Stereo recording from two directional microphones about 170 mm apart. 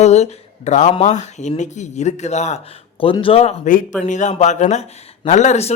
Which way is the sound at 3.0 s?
30° left (ahead or behind).